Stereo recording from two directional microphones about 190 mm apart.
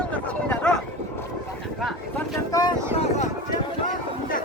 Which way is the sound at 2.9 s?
35° left (ahead or behind).